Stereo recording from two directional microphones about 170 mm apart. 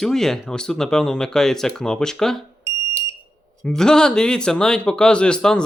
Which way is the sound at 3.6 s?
5° left (ahead or behind).